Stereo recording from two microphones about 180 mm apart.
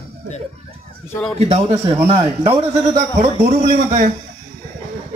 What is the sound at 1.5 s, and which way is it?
Speech, 35° right (ahead or behind).